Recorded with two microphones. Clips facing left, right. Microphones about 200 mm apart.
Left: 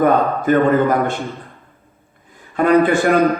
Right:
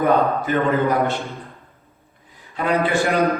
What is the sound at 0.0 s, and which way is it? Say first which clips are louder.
A man's voice: left 3 dB; 50° left (ahead or behind).